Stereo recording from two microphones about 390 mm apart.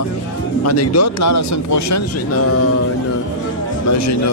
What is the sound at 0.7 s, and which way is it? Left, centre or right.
Speech, left.